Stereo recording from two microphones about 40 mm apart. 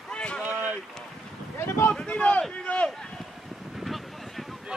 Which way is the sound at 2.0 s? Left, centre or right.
Left.